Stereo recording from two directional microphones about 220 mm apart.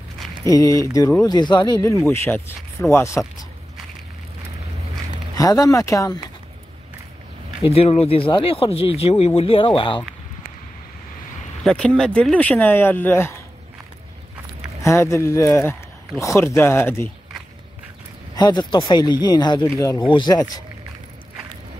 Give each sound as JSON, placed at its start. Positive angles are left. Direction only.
{"t": 0.4, "sound": "speech", "side_deg": 15}
{"t": 5.4, "sound": "speech", "side_deg": 15}
{"t": 7.6, "sound": "speech", "side_deg": 25}
{"t": 11.6, "sound": "speech", "side_deg": 5}
{"t": 14.8, "sound": "speech", "side_deg": 15}
{"t": 18.3, "sound": "speech", "side_deg": 20}